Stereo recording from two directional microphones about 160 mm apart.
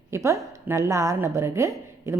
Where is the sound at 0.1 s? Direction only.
20° right (ahead or behind).